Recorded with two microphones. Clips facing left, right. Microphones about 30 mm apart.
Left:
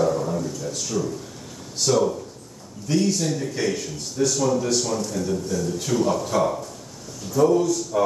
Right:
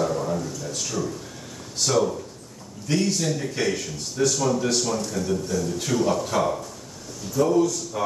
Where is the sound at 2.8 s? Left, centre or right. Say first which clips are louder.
Left 2 dB; centre.